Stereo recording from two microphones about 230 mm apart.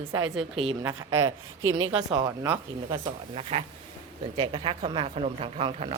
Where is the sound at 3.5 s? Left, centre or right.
Right.